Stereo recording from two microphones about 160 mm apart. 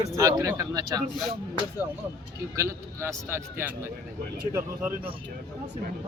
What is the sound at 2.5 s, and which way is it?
Speech, 20° right (ahead or behind).